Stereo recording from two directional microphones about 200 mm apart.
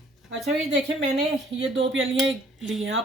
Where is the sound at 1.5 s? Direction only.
65° right (ahead or behind).